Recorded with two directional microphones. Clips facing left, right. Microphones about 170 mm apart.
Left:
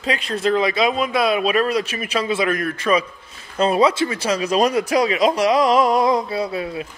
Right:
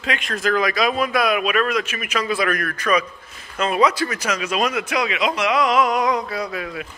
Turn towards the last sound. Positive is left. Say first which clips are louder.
# left 3 dB
turn(degrees=30)  # may be behind; listen again after turning